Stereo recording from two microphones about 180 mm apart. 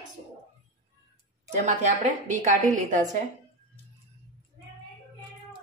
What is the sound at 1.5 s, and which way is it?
A woman's voice, 40° right (ahead or behind).